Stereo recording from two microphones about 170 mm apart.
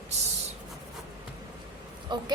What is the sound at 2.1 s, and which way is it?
Speech, 25° right (ahead or behind).